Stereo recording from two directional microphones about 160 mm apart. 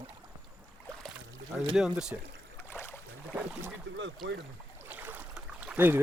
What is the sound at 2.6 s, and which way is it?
Boat, 15° left (ahead or behind).